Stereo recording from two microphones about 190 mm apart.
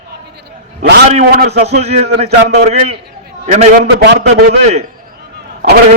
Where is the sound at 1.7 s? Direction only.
35° right (ahead or behind).